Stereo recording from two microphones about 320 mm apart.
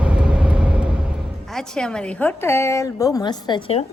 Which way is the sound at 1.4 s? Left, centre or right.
Centre.